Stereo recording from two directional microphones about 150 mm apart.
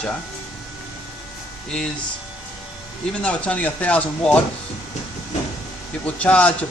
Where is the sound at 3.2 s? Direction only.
10° left (ahead or behind).